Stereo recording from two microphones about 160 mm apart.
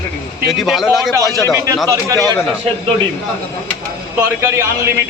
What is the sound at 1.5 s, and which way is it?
Speech, 20° right (ahead or behind).